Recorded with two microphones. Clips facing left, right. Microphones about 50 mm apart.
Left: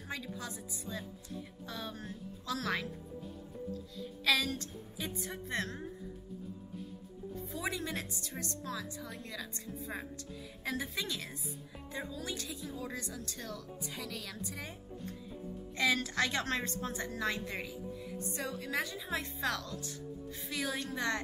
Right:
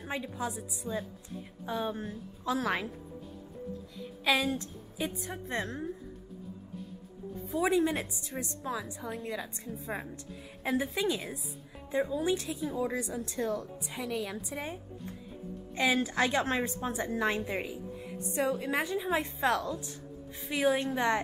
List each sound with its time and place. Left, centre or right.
0.0 s a woman's voice: right
4.0 s a woman's voice: right
7.5 s a woman's voice: right
13.8 s a woman's voice: centre